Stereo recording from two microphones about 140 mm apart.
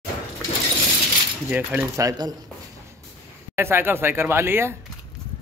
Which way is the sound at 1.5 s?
10° right (ahead or behind).